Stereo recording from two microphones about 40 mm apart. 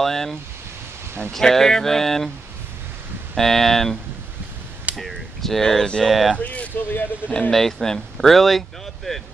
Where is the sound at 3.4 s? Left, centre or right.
Centre.